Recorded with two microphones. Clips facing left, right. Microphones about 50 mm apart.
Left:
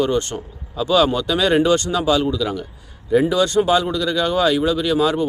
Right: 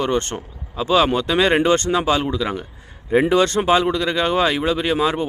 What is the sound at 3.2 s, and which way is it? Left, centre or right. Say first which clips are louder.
Speech: right 1 dB; right.